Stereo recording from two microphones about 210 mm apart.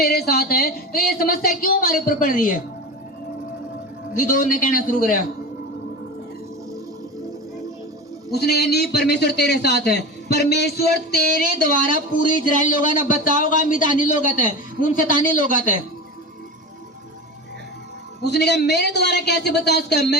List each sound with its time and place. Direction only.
0.0 s a man's voice: 50° left (ahead or behind)
4.1 s a man's voice: 40° left (ahead or behind)
8.3 s a man's voice: 50° left (ahead or behind)
18.2 s a man's voice: 50° left (ahead or behind)